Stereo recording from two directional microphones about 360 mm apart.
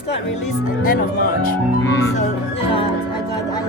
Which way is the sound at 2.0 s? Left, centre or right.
Centre.